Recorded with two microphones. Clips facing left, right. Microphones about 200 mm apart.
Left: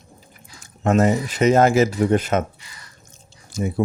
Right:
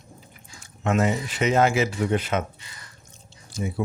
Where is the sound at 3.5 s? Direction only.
45° left (ahead or behind).